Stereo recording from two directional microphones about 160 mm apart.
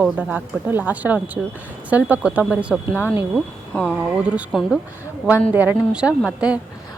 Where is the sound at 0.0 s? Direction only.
10° right (ahead or behind).